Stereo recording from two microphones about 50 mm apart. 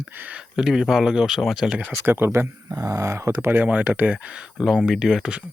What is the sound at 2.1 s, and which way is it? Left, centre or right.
Speech, right.